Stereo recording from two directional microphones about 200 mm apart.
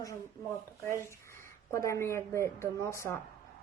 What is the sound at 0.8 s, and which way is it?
Speech, 15° left (ahead or behind).